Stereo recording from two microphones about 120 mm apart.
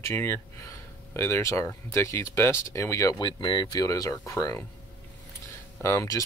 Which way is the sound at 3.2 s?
40° left (ahead or behind).